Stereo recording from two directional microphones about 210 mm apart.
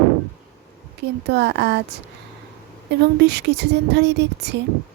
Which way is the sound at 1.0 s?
55° right (ahead or behind).